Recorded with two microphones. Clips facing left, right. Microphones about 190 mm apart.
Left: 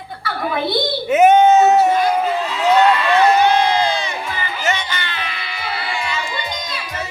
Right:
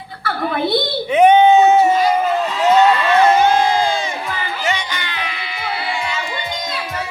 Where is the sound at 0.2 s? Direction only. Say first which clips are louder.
Right 1 dB; 55° right (ahead or behind).